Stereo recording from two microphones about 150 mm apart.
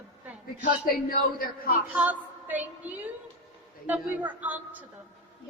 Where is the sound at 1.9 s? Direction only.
10° right (ahead or behind).